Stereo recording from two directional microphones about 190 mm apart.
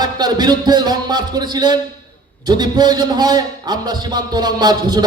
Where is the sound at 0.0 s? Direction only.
20° right (ahead or behind).